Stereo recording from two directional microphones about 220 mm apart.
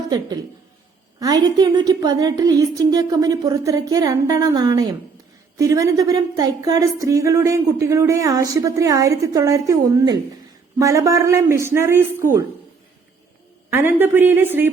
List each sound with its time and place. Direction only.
1.2 s a woman's voice: 20° right (ahead or behind)
13.7 s a woman's voice: 10° right (ahead or behind)